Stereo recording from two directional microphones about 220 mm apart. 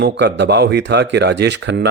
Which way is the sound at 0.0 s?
50° right (ahead or behind).